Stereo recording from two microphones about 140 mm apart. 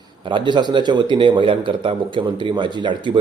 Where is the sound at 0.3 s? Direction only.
35° right (ahead or behind).